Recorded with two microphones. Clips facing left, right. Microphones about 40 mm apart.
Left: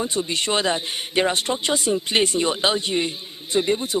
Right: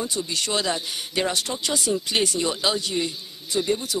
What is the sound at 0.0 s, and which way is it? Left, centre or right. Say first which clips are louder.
Speech: left 3 dB; left.